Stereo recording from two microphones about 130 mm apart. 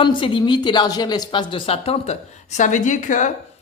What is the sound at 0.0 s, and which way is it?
Speech, 35° left (ahead or behind).